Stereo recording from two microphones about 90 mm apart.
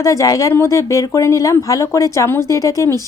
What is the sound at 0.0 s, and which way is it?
Speech, 40° left (ahead or behind).